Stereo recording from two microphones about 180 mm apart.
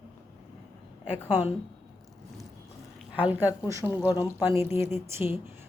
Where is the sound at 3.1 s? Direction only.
10° right (ahead or behind).